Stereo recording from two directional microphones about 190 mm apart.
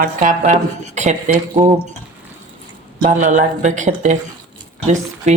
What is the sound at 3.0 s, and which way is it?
Speech, 40° right (ahead or behind).